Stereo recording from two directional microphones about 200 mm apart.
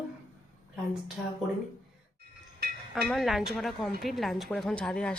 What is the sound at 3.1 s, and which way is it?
Speech, centre (ahead or behind).